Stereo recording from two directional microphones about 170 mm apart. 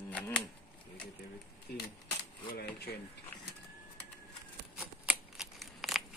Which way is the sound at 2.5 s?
65° left (ahead or behind).